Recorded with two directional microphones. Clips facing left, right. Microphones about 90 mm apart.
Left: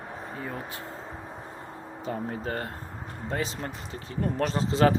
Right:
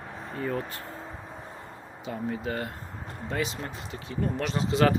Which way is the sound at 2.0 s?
40° left (ahead or behind).